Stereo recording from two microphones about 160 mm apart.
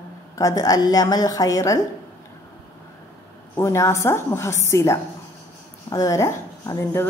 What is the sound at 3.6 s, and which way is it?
A woman's voice, 20° left (ahead or behind).